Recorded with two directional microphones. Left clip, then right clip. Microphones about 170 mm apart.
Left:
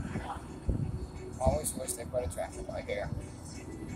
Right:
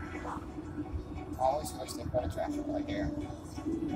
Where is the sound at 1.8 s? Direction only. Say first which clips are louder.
Even; 20° left (ahead or behind).